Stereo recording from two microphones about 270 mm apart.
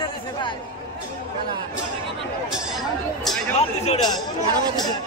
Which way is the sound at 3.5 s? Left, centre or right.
Left.